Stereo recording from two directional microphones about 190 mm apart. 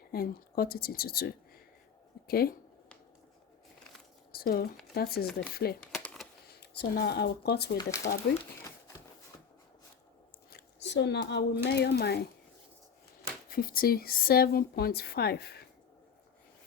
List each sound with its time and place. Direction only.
0.1 s a woman's voice: 55° left (ahead or behind)
4.3 s a sound: 55° left (ahead or behind)
4.9 s a woman's voice: 55° left (ahead or behind)
5.8 s a sound: 5° left (ahead or behind)
6.5 s speech: 60° left (ahead or behind)
10.5 s speech: 65° left (ahead or behind)
13.5 s a woman's voice: 50° left (ahead or behind)